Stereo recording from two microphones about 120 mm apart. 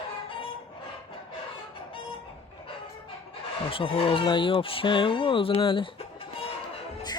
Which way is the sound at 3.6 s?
50° left (ahead or behind).